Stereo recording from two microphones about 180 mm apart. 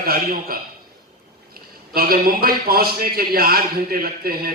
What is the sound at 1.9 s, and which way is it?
A man's voice, 55° right (ahead or behind).